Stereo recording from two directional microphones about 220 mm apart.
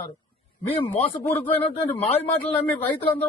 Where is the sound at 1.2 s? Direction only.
10° left (ahead or behind).